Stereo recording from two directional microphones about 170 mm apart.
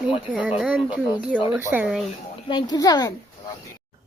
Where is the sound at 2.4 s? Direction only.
25° left (ahead or behind).